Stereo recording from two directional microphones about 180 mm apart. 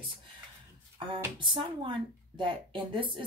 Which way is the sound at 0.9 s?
30° right (ahead or behind).